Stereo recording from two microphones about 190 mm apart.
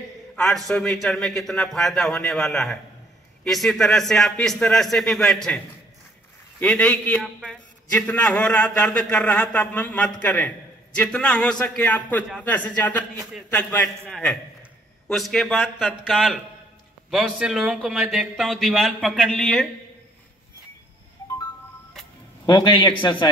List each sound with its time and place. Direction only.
0.7 s a man's voice: centre (ahead or behind)
6.6 s a man's voice: 5° left (ahead or behind)
22.5 s a man's voice: 25° left (ahead or behind)